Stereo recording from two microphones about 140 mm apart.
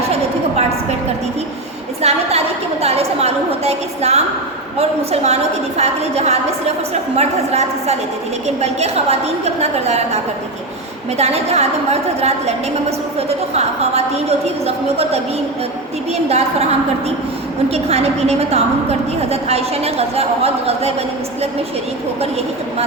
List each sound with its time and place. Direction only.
2.0 s a sound: 50° right (ahead or behind)
4.8 s a woman's voice: 50° right (ahead or behind)
11.2 s a woman's voice: 50° right (ahead or behind)
16.1 s a woman's voice: 50° right (ahead or behind)
17.7 s a woman's voice: 50° right (ahead or behind)